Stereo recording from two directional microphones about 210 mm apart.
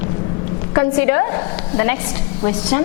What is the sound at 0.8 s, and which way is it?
A woman's voice, 15° left (ahead or behind).